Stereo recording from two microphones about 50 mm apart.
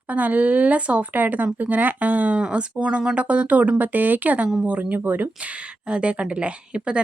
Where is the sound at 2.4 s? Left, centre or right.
Centre; by 5.3 s right.